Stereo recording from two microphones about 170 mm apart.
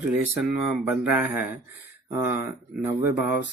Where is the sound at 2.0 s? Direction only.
10° right (ahead or behind).